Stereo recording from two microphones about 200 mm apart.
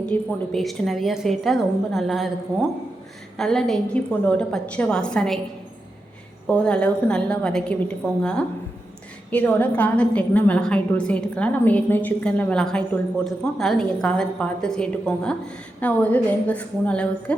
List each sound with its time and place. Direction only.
0.0 s a woman's voice: 5° left (ahead or behind)
6.5 s a woman's voice: 5° left (ahead or behind)